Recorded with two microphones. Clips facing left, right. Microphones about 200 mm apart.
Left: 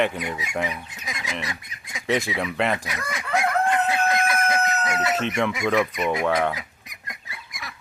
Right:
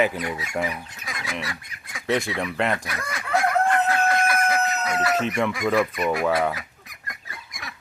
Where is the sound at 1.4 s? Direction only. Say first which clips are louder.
Even; 20° left (ahead or behind).